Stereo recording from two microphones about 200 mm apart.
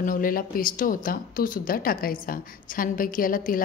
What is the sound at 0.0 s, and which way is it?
Speech, 45° left (ahead or behind).